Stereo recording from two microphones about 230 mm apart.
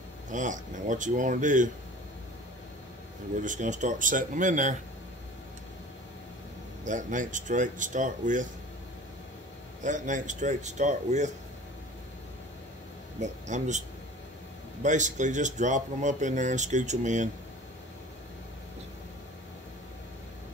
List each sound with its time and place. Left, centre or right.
0.3 s speech: right
3.3 s speech: right
6.8 s speech: right
9.8 s speech: right
13.2 s speech: right